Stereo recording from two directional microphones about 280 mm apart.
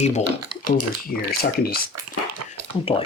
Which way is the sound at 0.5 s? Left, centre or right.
Right.